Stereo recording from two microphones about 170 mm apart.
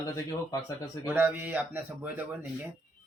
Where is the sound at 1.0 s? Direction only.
10° right (ahead or behind).